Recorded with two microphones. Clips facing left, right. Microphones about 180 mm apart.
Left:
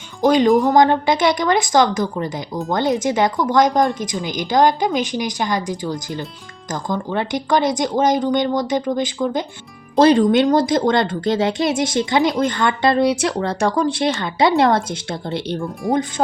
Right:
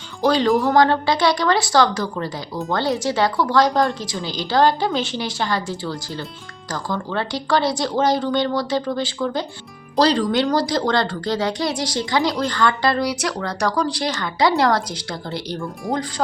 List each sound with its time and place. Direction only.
0.2 s a woman's voice: 20° left (ahead or behind)